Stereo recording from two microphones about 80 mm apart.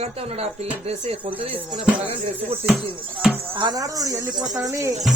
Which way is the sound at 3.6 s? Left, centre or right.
Right.